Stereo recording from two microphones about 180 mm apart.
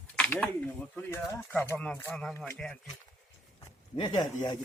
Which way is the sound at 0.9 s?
10° left (ahead or behind).